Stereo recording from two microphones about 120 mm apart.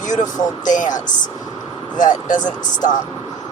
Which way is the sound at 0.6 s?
90° left.